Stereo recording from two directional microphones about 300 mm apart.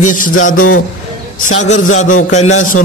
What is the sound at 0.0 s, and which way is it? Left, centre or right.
Speech, left.